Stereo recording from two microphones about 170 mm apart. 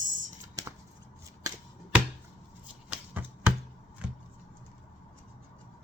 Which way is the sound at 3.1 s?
10° right (ahead or behind).